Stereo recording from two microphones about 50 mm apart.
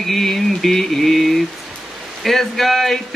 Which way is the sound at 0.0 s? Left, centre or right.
Centre.